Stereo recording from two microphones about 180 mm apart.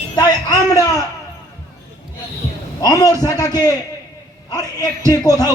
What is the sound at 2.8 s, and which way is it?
Speech, 20° left (ahead or behind).